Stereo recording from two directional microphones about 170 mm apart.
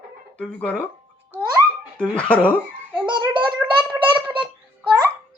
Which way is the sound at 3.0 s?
25° right (ahead or behind).